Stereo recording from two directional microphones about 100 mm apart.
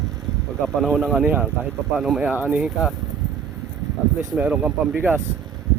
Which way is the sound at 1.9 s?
5° right (ahead or behind).